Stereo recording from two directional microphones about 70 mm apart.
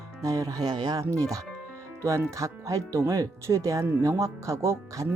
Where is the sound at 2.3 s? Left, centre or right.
Right.